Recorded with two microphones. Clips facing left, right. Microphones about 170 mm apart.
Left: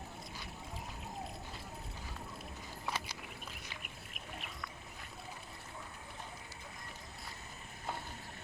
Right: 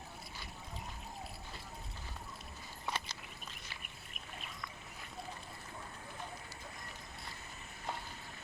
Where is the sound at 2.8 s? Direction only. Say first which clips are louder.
Even; 5° left (ahead or behind).